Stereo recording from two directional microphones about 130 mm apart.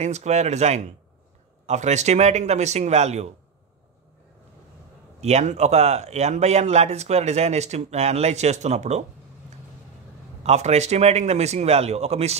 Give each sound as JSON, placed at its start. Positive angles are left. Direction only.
{"t": 0.0, "sound": "a man's voice", "side_deg": -60}
{"t": 5.2, "sound": "a man's voice", "side_deg": -60}
{"t": 10.4, "sound": "a man's voice", "side_deg": -55}